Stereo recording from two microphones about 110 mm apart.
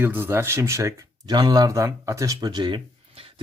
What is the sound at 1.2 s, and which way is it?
Speech, 40° right (ahead or behind).